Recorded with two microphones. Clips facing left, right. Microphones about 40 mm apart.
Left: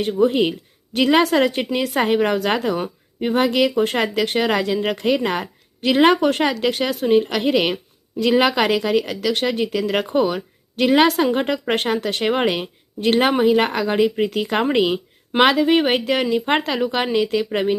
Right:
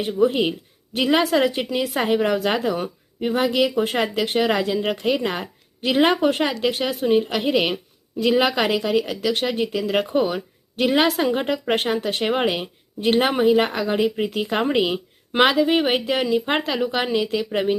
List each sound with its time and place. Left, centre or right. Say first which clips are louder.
0.0 s a woman's voice: left 2 dB; centre
3.2 s speech: left 3 dB; centre
3.4 s a woman's voice: left 2 dB; centre